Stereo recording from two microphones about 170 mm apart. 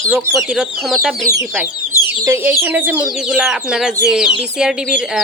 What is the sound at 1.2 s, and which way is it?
Speech, 20° right (ahead or behind).